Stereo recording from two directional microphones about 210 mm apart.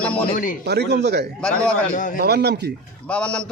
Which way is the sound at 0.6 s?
50° right (ahead or behind).